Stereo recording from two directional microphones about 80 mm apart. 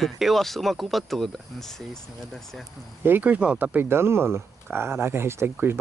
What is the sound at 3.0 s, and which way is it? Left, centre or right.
Speech, right.